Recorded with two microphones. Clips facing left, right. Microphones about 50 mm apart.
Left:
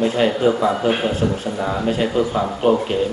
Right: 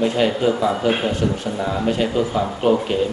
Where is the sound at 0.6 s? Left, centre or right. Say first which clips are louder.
Left 1 dB; centre.